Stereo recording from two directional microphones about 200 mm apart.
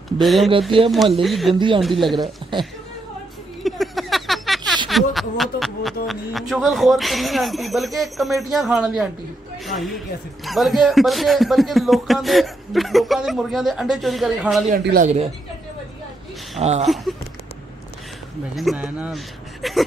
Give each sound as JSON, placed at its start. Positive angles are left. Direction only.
{"t": 0.2, "sound": "a man's voice", "side_deg": 0}
{"t": 2.5, "sound": "speech", "side_deg": -25}
{"t": 3.6, "sound": "a sound", "side_deg": 0}
{"t": 4.8, "sound": "a man's voice", "side_deg": 0}
{"t": 14.8, "sound": "speech", "side_deg": -55}
{"t": 16.5, "sound": "speech", "side_deg": -35}
{"t": 16.8, "sound": "a man's voice", "side_deg": 0}
{"t": 18.6, "sound": "a man's voice", "side_deg": -5}